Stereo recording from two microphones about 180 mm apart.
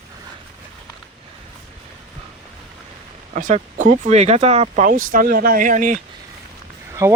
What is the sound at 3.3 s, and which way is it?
Speech, 45° right (ahead or behind).